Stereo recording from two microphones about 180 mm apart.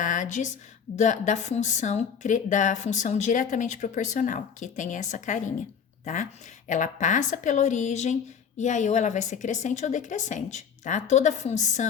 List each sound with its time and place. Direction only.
0.0 s a sound: 45° left (ahead or behind)
0.9 s a woman's voice: 40° left (ahead or behind)
6.7 s a woman's voice: 45° left (ahead or behind)